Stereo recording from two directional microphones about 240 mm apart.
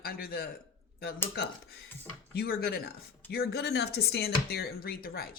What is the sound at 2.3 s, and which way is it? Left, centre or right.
Speech, left.